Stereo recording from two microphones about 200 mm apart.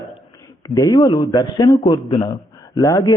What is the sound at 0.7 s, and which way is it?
A man's voice, 15° left (ahead or behind).